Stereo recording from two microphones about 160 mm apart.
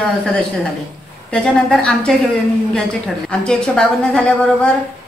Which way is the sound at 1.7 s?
5° left (ahead or behind).